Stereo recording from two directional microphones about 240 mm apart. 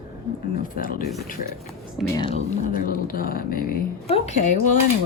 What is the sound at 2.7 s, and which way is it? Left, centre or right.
A woman's voice, left.